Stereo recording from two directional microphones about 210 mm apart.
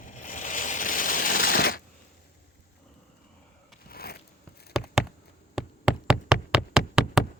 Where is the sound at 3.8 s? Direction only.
45° left (ahead or behind).